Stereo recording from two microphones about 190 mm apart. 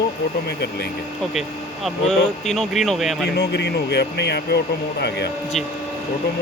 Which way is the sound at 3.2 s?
60° left (ahead or behind).